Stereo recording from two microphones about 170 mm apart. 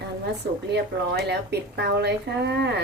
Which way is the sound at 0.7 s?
80° right.